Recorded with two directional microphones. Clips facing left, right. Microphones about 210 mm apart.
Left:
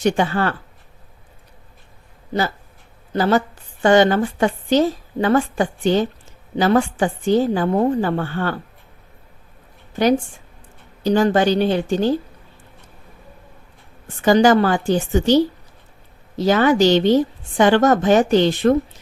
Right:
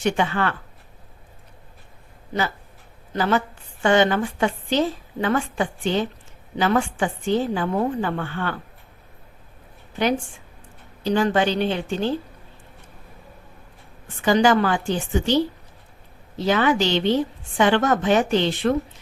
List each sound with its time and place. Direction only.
0.0 s a woman's voice: 40° left (ahead or behind)
3.1 s a woman's voice: 35° left (ahead or behind)
11.0 s a woman's voice: 40° left (ahead or behind)
14.2 s a woman's voice: 40° left (ahead or behind)
16.4 s a woman's voice: 40° left (ahead or behind)